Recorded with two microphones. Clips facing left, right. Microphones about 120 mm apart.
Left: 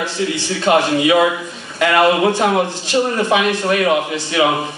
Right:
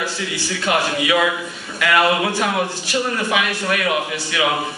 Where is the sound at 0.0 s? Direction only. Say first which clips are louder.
Left 5 dB; 20° left (ahead or behind).